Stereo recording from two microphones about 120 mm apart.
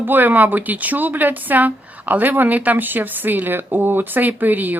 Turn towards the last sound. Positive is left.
turn(degrees=-15)  # may be behind; listen again after turning